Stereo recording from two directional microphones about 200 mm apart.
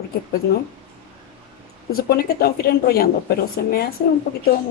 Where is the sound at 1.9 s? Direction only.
50° left (ahead or behind).